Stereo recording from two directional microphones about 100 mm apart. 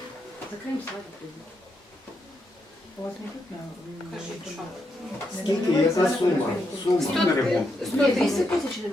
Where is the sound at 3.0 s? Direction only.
45° left (ahead or behind).